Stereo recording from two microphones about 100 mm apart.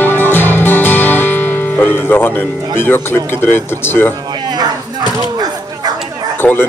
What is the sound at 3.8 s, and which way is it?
Speech, 20° left (ahead or behind).